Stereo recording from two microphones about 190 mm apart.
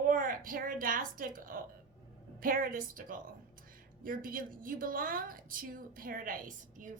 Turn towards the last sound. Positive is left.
turn(degrees=-45)  # may be behind; listen again after turning